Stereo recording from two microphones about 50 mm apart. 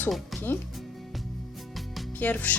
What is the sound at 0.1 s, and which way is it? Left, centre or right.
Speech, centre.